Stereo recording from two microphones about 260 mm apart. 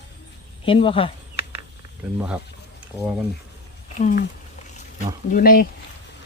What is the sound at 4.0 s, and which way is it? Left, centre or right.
Speech, left.